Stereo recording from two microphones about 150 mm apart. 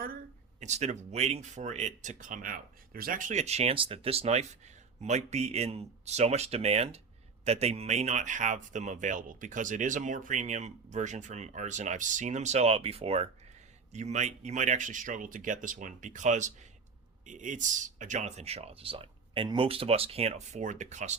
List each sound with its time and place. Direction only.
0.6 s speech: 50° right (ahead or behind)